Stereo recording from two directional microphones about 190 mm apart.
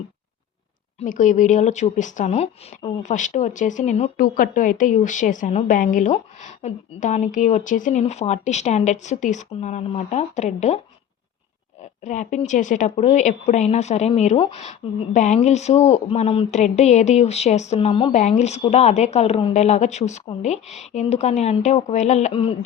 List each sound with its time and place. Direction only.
0.9 s speech: 40° left (ahead or behind)
11.8 s speech: 40° left (ahead or behind)